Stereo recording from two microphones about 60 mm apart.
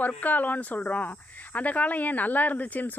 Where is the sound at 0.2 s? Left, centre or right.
Left.